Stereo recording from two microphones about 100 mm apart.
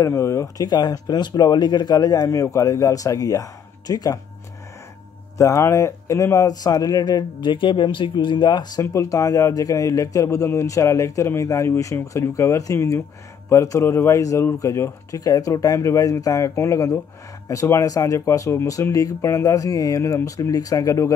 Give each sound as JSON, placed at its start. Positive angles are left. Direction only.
{"t": 0.0, "sound": "speech", "side_deg": 30}
{"t": 0.7, "sound": "speech", "side_deg": 45}
{"t": 5.4, "sound": "speech", "side_deg": 30}
{"t": 8.9, "sound": "speech", "side_deg": 35}